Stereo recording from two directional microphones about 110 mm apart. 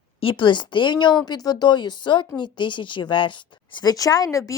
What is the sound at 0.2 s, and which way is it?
Speech, 50° left (ahead or behind).